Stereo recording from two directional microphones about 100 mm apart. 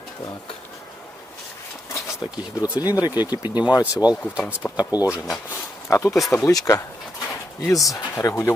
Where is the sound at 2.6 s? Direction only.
40° left (ahead or behind).